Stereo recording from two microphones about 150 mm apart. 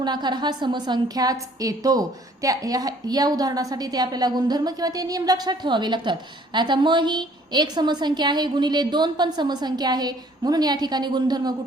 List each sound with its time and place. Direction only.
0.0 s a woman's voice: 30° right (ahead or behind)